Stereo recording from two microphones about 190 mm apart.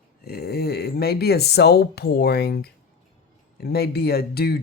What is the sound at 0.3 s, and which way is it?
Speech, 55° left (ahead or behind).